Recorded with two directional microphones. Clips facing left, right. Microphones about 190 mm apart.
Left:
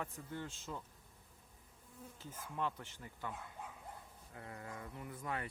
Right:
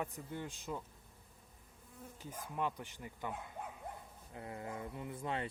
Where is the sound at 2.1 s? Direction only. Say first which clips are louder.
Right 2 dB; 15° right (ahead or behind).